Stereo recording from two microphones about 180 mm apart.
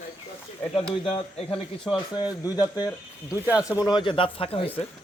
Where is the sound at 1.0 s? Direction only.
30° left (ahead or behind).